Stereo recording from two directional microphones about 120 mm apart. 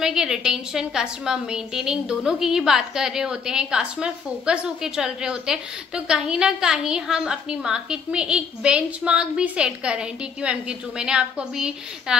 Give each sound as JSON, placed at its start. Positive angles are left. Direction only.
{"t": 0.0, "sound": "a woman's voice", "side_deg": -5}